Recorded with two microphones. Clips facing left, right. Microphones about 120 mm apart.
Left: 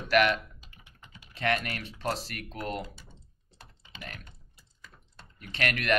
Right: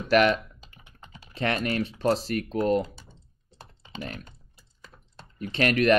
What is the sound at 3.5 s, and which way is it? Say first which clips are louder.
Computer keyboard: right 10 dB; 30° right (ahead or behind).